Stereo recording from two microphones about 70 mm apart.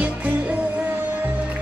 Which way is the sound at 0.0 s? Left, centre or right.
Right.